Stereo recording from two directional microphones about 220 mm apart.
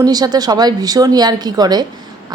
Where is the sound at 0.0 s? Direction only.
20° right (ahead or behind).